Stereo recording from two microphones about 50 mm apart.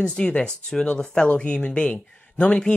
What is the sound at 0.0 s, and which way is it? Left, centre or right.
Speech, centre.